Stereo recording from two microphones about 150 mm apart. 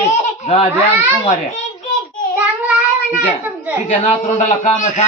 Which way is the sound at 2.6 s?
10° right (ahead or behind).